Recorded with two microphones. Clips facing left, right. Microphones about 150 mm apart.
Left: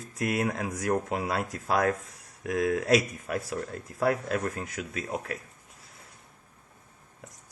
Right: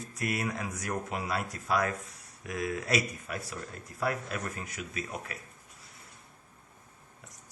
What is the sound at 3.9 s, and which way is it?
Speech, 90° left.